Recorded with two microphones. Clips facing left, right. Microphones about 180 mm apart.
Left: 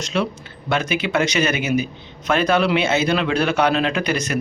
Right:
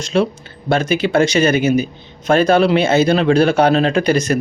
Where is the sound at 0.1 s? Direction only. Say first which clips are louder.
Right 7 dB; 35° right (ahead or behind).